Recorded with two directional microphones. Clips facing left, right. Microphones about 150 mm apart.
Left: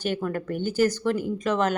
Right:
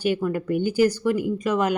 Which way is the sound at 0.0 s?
10° right (ahead or behind).